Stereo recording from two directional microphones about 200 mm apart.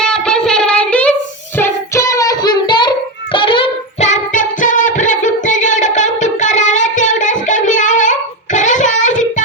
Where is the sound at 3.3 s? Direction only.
25° left (ahead or behind).